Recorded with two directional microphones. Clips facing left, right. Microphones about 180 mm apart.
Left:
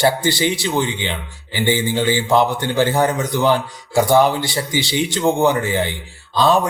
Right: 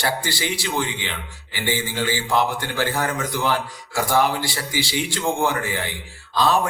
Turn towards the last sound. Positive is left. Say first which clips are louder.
# left 4 dB
turn(degrees=25)  # may be behind; listen again after turning